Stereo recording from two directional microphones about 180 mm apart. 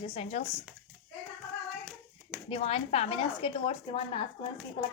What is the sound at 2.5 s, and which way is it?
A woman's voice, 35° left (ahead or behind).